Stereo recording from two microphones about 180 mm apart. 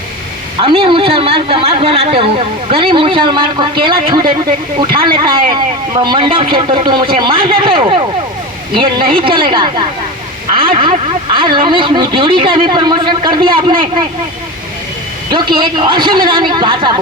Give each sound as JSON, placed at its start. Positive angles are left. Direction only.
{"t": 0.6, "sound": "speech", "side_deg": -30}
{"t": 15.3, "sound": "speech", "side_deg": -25}